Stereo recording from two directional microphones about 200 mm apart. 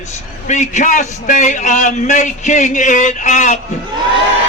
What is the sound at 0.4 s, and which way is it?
A man's voice, 35° left (ahead or behind).